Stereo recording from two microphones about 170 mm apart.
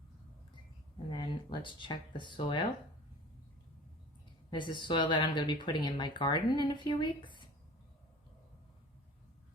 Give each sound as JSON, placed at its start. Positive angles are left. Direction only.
{"t": 1.1, "sound": "speech", "side_deg": 25}
{"t": 4.5, "sound": "speech", "side_deg": 25}